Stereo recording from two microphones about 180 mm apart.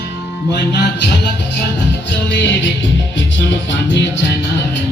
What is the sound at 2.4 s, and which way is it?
Music, 90° left.